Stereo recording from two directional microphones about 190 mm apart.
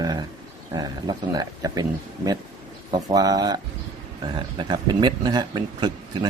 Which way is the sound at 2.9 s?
20° right (ahead or behind).